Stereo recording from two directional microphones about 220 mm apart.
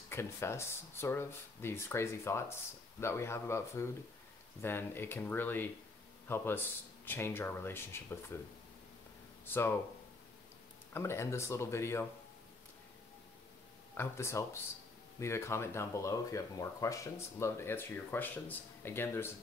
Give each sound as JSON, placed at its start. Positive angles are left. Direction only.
{"t": 0.1, "sound": "speech", "side_deg": 10}
{"t": 9.5, "sound": "speech", "side_deg": 10}
{"t": 10.9, "sound": "speech", "side_deg": 10}
{"t": 13.9, "sound": "speech", "side_deg": 10}